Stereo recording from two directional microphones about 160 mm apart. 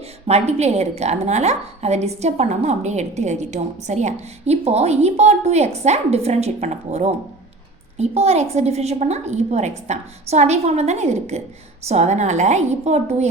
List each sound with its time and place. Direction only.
0.3 s a woman's voice: 40° right (ahead or behind)